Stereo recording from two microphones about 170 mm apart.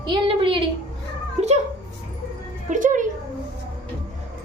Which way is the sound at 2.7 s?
50° right (ahead or behind).